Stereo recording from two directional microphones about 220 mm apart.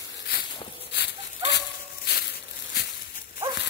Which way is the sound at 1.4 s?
50° left (ahead or behind).